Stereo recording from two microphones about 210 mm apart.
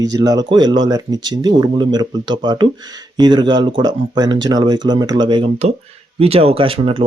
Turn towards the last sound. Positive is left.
turn(degrees=-25)  # may be behind; listen again after turning